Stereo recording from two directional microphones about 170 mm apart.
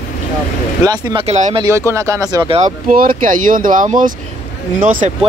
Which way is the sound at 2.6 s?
55° right (ahead or behind).